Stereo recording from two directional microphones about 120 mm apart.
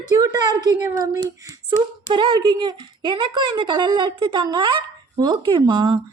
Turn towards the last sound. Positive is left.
turn(degrees=-35)  # may be behind; listen again after turning